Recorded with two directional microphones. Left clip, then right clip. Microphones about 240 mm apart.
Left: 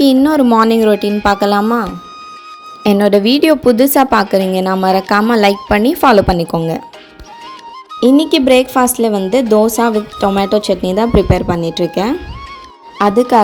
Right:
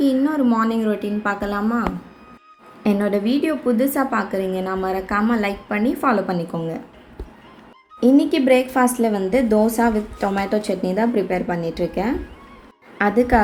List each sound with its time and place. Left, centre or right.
0.0 s a woman's voice: left
2.8 s a woman's voice: left
7.9 s speech: left